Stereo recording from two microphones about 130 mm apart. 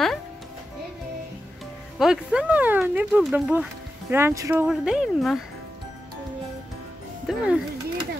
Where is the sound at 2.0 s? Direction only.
5° right (ahead or behind).